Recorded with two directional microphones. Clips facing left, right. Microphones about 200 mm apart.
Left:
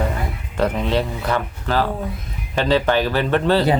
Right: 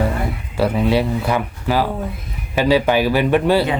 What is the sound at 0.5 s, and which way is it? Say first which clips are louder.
Speech: right 3 dB; 10° right (ahead or behind).